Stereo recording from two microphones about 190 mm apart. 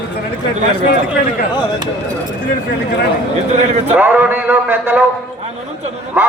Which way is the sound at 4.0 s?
10° right (ahead or behind).